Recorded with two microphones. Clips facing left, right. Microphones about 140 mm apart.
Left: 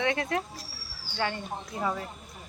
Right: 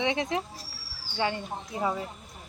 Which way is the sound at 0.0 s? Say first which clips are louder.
Even; 15° right (ahead or behind).